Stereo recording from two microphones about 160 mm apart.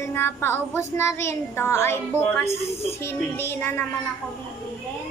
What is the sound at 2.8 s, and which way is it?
Speech, 15° left (ahead or behind).